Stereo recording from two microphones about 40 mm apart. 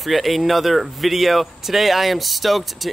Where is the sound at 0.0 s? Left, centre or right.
Centre.